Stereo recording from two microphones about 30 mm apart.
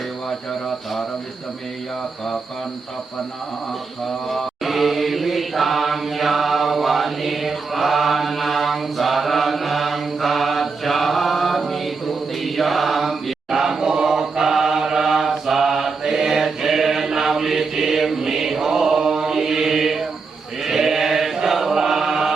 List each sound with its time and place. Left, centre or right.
4.3 s chant: centre
12.4 s mantra: centre
13.5 s chant: centre
14.5 s mantra: centre
20.7 s chant: centre